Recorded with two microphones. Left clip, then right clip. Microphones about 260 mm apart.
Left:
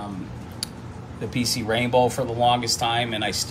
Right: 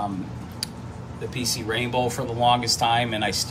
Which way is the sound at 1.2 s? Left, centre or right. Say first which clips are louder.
Left 2 dB; left.